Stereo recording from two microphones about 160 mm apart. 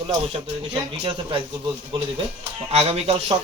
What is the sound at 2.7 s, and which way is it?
Speech, 40° right (ahead or behind).